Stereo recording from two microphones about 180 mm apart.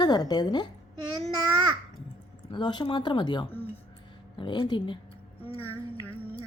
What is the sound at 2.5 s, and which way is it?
Speech, 25° left (ahead or behind).